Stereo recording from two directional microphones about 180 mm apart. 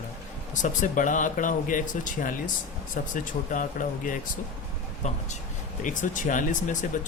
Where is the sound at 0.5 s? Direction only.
45° left (ahead or behind).